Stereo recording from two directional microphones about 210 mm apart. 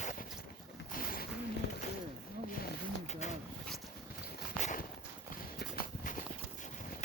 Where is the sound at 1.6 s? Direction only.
55° left (ahead or behind).